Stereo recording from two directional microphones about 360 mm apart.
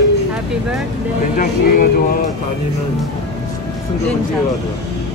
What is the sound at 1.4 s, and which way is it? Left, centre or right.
Speech, left.